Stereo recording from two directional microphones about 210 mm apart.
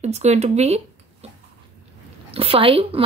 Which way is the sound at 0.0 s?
30° right (ahead or behind).